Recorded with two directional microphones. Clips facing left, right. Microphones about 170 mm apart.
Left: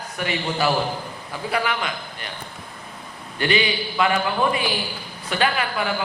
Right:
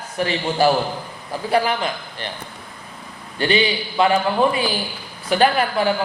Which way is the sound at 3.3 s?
30° right (ahead or behind).